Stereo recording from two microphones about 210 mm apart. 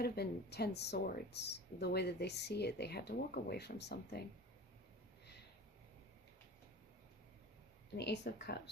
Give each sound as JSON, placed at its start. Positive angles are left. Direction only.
{"t": 0.0, "sound": "speech", "side_deg": 50}
{"t": 7.9, "sound": "speech", "side_deg": 55}